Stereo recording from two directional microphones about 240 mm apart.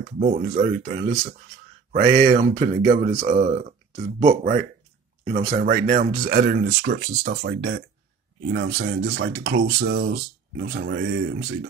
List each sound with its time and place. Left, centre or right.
0.2 s speech: right